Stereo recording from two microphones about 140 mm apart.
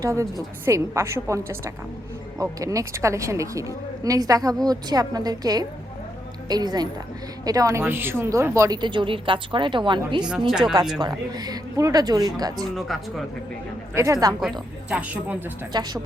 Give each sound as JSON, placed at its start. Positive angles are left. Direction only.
{"t": 0.0, "sound": "speech", "side_deg": -20}
{"t": 8.8, "sound": "a woman's voice", "side_deg": -35}
{"t": 10.2, "sound": "speech", "side_deg": -5}
{"t": 11.0, "sound": "speech", "side_deg": -30}
{"t": 12.7, "sound": "speech", "side_deg": 0}
{"t": 13.9, "sound": "speech", "side_deg": -20}
{"t": 14.8, "sound": "speech", "side_deg": -10}
{"t": 15.7, "sound": "speech", "side_deg": -30}